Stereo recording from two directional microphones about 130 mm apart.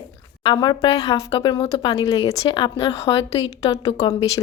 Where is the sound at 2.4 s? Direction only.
35° left (ahead or behind).